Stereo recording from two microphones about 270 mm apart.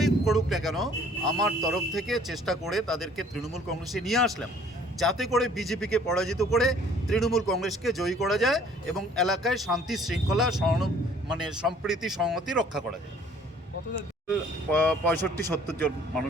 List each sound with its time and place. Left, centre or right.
0.0 s speech: centre
14.3 s speech: centre